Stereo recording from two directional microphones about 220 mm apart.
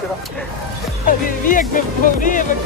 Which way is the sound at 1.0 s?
40° left (ahead or behind).